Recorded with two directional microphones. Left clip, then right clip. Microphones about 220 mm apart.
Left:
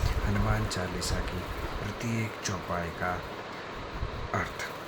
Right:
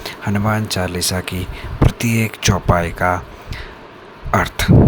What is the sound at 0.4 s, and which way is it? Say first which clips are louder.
Speech: right 15 dB; 45° right (ahead or behind).